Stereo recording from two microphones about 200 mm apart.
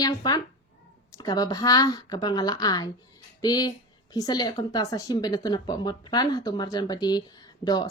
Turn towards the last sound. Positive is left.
turn(degrees=20)  # may be behind; listen again after turning